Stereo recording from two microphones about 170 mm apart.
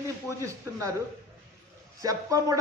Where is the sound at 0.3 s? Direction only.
20° right (ahead or behind).